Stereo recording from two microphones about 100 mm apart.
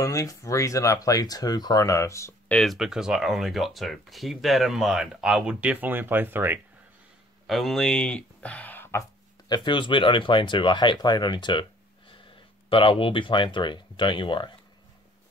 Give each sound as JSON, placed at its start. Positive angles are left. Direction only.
{"t": 0.0, "sound": "speech", "side_deg": 35}
{"t": 2.6, "sound": "speech", "side_deg": 0}
{"t": 7.4, "sound": "speech", "side_deg": 0}
{"t": 9.5, "sound": "speech", "side_deg": 50}
{"t": 12.6, "sound": "speech", "side_deg": 60}